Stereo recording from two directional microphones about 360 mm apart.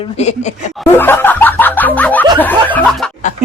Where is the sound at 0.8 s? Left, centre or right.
Centre.